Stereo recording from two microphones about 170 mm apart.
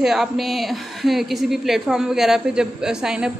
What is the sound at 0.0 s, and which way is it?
A woman's voice, centre (ahead or behind).